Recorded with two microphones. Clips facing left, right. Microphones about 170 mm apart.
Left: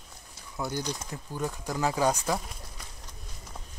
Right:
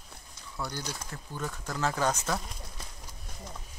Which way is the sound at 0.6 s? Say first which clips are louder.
Left 5 dB; 15° left (ahead or behind).